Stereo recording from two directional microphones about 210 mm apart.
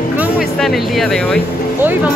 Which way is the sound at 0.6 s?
Centre (ahead or behind).